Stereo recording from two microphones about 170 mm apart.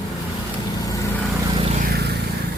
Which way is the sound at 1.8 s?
65° right (ahead or behind).